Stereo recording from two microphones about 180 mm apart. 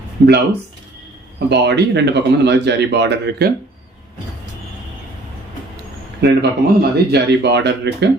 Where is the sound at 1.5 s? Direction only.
70° right (ahead or behind).